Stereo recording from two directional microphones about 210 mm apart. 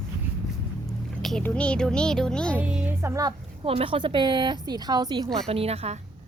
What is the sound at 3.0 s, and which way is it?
Speech, 15° right (ahead or behind).